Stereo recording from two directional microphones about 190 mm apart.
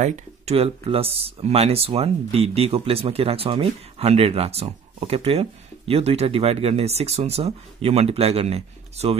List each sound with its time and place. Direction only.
0.0 s speech: 35° right (ahead or behind)